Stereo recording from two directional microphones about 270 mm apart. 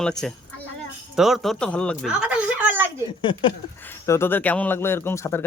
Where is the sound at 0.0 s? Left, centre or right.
Centre.